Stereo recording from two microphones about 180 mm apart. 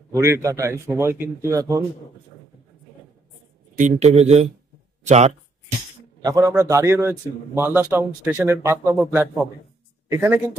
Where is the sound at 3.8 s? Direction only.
40° right (ahead or behind).